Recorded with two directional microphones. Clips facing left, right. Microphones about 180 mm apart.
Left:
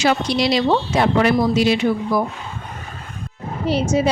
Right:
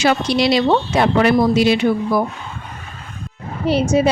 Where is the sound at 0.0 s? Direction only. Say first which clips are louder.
Right 2 dB; 65° right (ahead or behind).